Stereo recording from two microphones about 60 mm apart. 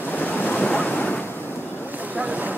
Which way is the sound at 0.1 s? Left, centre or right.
Left.